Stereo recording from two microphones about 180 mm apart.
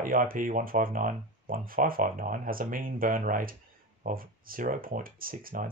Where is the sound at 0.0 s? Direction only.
50° right (ahead or behind).